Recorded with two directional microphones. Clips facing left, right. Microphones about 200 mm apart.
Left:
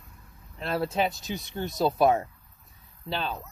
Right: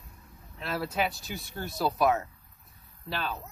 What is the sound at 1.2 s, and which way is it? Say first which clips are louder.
Speech: left 5 dB; 20° left (ahead or behind).